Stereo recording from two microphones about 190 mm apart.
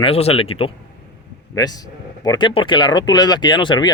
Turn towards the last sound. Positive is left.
turn(degrees=25)  # may be behind; listen again after turning